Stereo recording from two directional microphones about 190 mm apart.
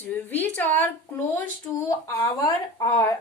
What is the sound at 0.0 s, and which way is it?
A woman's voice, 10° left (ahead or behind).